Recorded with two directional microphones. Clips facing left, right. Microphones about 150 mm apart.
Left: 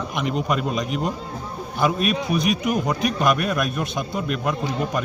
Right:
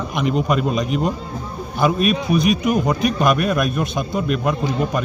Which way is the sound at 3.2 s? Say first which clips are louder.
Right 3 dB; 20° right (ahead or behind).